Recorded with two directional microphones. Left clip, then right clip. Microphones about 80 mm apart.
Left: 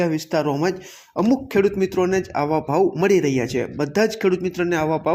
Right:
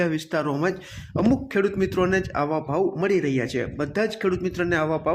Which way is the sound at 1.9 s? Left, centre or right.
Centre.